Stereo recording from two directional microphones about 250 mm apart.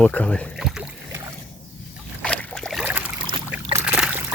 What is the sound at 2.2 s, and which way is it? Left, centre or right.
Boat, centre.